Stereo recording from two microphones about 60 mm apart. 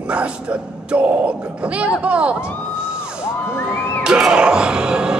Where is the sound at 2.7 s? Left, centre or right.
Centre.